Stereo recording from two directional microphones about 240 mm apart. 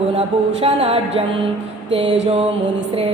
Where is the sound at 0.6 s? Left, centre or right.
Right.